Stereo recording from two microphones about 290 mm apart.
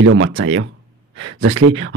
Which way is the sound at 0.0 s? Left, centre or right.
Right.